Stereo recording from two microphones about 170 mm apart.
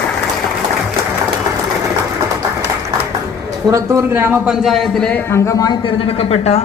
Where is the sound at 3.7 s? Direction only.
15° right (ahead or behind); by 5.7 s 20° left (ahead or behind).